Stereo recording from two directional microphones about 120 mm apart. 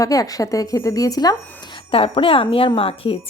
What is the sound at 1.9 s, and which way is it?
Speech, 50° left (ahead or behind).